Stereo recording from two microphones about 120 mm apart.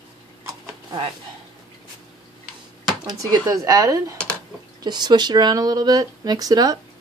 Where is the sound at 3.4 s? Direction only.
30° right (ahead or behind).